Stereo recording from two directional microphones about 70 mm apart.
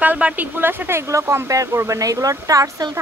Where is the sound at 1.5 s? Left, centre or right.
Right.